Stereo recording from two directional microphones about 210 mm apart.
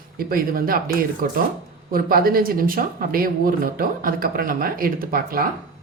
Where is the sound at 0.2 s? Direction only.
45° right (ahead or behind).